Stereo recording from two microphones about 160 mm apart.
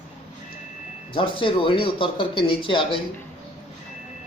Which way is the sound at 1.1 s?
35° left (ahead or behind).